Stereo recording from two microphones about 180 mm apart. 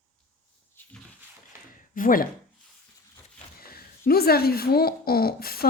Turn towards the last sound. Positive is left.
turn(degrees=55)  # may be behind; listen again after turning